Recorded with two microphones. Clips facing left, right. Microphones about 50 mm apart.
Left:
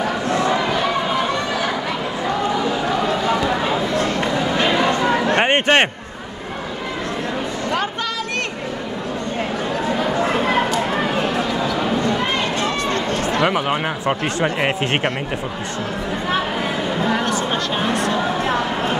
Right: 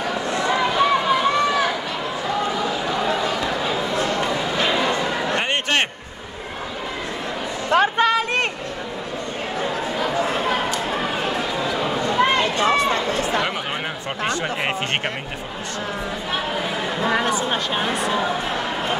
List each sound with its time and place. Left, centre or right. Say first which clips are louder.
5.3 s a sound: left 7 dB; left
7.7 s a sound: right 9 dB; right
12.5 s run: right 2 dB; centre
13.4 s chatter: left 6 dB; centre
17.0 s a woman's voice: right 1 dB; centre
17.5 s speech: left 2 dB; centre